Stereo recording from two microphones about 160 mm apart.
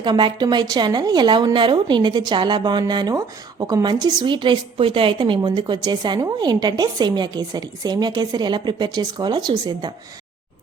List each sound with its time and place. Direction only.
0.0 s a woman's voice: 30° right (ahead or behind)